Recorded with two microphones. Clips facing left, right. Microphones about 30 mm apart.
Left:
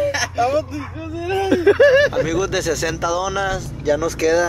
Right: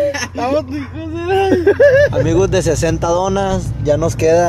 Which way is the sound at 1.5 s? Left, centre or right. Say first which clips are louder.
Right 2 dB; left.